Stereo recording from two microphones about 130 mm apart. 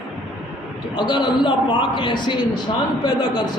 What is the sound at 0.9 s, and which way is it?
A man's voice, 35° left (ahead or behind).